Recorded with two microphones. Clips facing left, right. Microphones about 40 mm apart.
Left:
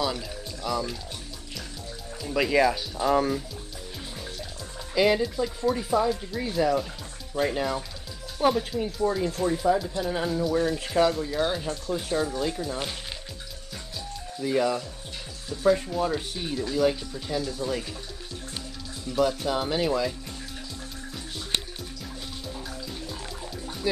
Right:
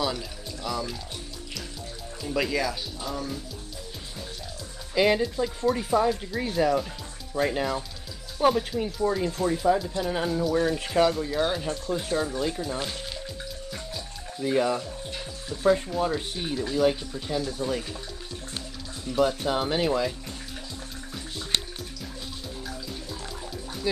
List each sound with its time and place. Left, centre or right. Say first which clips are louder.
0.0 s speech: even; centre
2.2 s speech: left 1 dB; centre
3.1 s speech: left 11 dB; left
4.9 s speech: even; centre
14.4 s speech: even; centre
19.1 s speech: right 1 dB; centre